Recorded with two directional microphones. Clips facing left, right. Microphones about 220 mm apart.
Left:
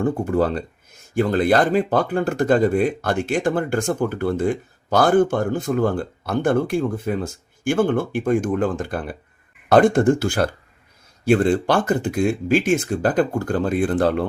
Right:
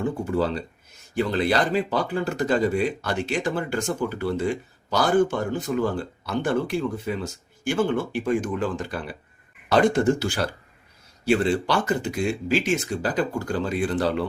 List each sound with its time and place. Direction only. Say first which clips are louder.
0.0 s speech: left 4 dB; 50° left (ahead or behind)